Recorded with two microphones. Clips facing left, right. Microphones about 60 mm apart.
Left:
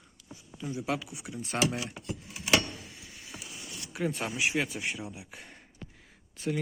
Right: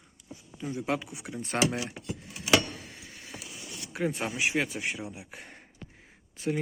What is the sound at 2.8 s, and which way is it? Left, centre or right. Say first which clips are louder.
Tick-tock: right 2 dB; right.